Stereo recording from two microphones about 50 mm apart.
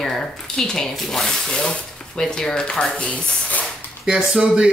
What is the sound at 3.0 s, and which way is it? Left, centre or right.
Speech, left.